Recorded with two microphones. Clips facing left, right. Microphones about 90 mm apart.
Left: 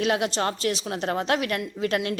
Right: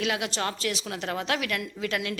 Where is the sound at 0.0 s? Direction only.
35° left (ahead or behind).